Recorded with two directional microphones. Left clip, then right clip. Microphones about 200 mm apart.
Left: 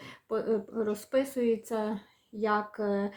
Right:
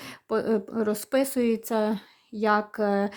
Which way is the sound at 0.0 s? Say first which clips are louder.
Right 5 dB; 50° right (ahead or behind).